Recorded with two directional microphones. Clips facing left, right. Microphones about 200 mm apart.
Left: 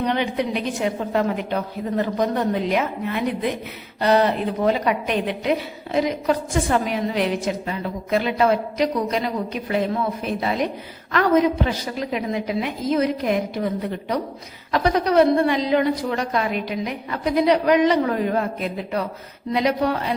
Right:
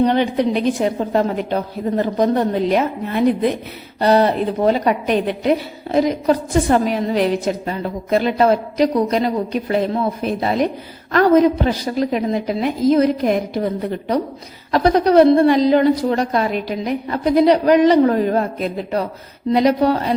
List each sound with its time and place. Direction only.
0.0 s a woman's voice: 35° right (ahead or behind)
14.7 s a woman's voice: 35° right (ahead or behind)